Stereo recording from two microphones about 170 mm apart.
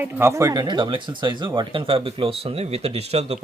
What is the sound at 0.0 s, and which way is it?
Speech, 15° right (ahead or behind).